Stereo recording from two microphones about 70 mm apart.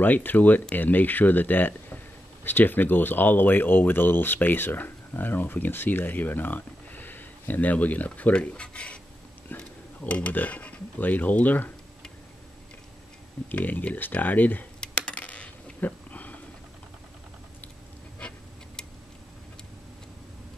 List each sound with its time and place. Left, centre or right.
0.0 s speech: left
13.5 s speech: left
14.8 s coin: centre